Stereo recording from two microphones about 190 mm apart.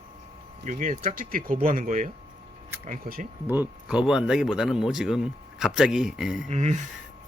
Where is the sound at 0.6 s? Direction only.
45° right (ahead or behind).